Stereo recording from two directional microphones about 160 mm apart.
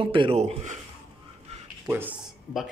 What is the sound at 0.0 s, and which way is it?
Speech, 30° right (ahead or behind).